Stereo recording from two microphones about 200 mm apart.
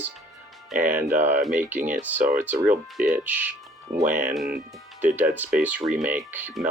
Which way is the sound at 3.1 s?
10° right (ahead or behind).